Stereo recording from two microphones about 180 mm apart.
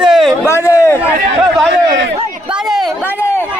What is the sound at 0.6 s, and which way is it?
Speech, 15° left (ahead or behind).